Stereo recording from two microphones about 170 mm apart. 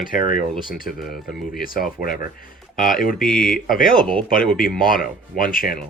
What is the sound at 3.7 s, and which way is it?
Speech, 55° left (ahead or behind).